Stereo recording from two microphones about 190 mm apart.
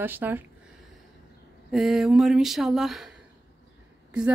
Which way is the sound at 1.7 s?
Centre (ahead or behind).